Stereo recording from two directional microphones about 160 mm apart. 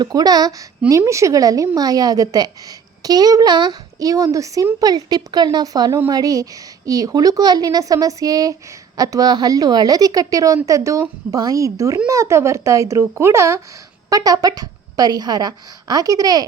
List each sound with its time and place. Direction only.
0.0 s a woman's voice: 25° right (ahead or behind)